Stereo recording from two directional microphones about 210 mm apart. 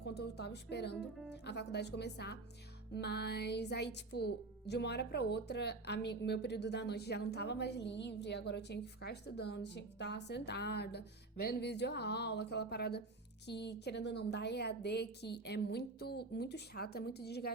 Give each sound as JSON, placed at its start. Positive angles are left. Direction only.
{"t": 0.0, "sound": "music", "side_deg": 50}